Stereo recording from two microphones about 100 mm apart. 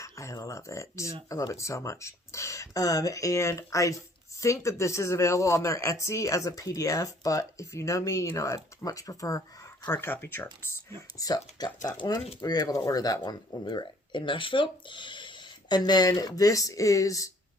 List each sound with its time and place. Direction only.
0.0 s speech: 30° left (ahead or behind)
9.9 s speech: 20° left (ahead or behind)
11.2 s speech: 40° left (ahead or behind)
13.7 s speech: 55° left (ahead or behind); by 17.3 s 35° left (ahead or behind)